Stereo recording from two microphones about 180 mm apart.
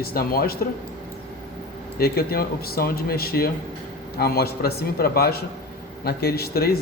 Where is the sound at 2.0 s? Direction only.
60° left (ahead or behind).